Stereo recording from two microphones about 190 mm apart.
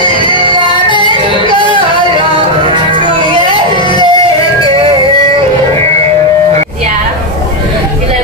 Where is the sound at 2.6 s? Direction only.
25° right (ahead or behind).